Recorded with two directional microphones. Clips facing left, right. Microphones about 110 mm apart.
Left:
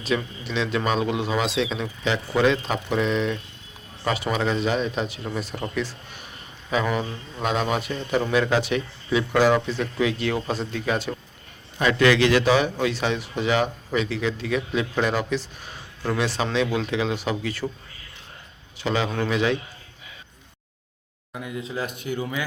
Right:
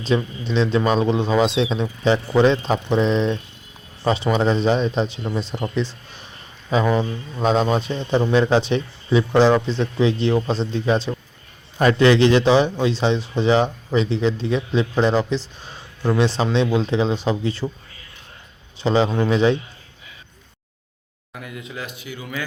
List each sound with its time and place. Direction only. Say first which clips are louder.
0.1 s a man's voice: right 5 dB; 30° right (ahead or behind)
16.4 s speech: right 4 dB; 30° right (ahead or behind)
18.8 s a man's voice: right 6 dB; 30° right (ahead or behind)
21.3 s speech: left 3 dB; 25° left (ahead or behind)
21.8 s speech: left 7 dB; 50° left (ahead or behind)